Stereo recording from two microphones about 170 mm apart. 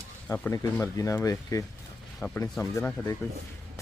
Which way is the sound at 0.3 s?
15° left (ahead or behind).